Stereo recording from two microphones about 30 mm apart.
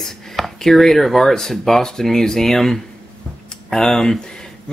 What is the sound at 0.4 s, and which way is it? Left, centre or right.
Speech, centre.